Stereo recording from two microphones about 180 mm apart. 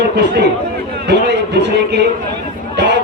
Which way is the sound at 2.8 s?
70° right (ahead or behind).